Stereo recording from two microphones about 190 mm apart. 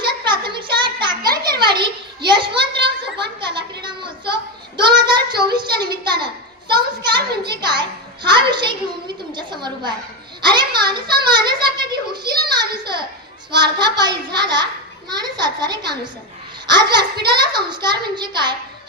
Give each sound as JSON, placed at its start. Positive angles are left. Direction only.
{"t": 0.0, "sound": "a sound", "side_deg": -25}
{"t": 1.5, "sound": "children playing", "side_deg": -25}
{"t": 4.8, "sound": "a child's voice", "side_deg": -25}